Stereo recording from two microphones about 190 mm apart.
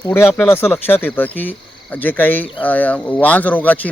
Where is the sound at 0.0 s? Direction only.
15° left (ahead or behind).